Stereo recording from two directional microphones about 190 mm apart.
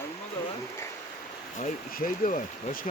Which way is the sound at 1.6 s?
45° left (ahead or behind).